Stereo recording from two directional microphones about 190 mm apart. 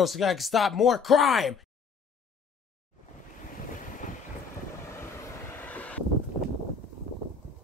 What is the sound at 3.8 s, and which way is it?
Vehicle, 45° left (ahead or behind).